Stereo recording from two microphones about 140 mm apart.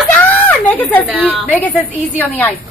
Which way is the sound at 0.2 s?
10° left (ahead or behind).